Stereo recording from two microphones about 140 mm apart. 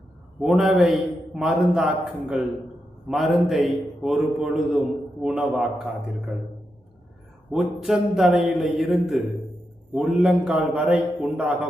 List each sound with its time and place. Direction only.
0.3 s a man's voice: 5° right (ahead or behind)
7.5 s a man's voice: 5° right (ahead or behind)